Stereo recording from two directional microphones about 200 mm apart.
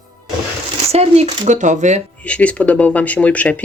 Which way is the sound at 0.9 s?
30° right (ahead or behind).